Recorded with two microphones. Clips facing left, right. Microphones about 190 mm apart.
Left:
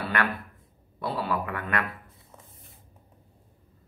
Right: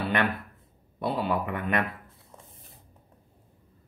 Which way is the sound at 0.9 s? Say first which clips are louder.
Right 2 dB; 20° right (ahead or behind).